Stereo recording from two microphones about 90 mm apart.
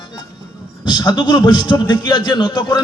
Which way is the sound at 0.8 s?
50° left (ahead or behind).